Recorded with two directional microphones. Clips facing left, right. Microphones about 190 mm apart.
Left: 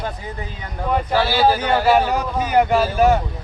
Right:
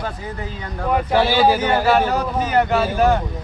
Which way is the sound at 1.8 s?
10° left (ahead or behind).